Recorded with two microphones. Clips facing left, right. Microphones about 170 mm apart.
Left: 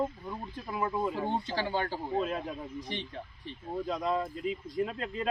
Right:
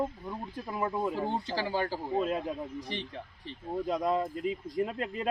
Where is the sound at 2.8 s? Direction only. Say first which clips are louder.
Even; 35° right (ahead or behind).